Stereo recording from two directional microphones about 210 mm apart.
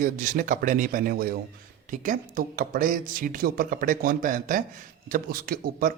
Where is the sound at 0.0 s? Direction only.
40° right (ahead or behind).